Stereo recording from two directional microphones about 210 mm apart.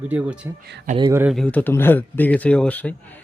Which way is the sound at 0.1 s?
5° right (ahead or behind).